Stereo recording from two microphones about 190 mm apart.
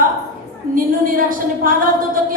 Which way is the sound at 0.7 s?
45° right (ahead or behind).